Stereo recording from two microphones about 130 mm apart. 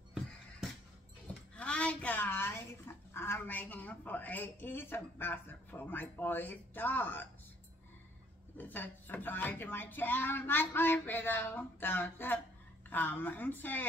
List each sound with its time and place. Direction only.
1.6 s a sound: 10° left (ahead or behind)
3.1 s a woman's voice: 20° left (ahead or behind)
8.5 s a woman's voice: 15° left (ahead or behind)